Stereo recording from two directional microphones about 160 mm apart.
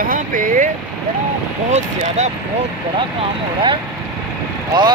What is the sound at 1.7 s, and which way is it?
Speech, 45° right (ahead or behind).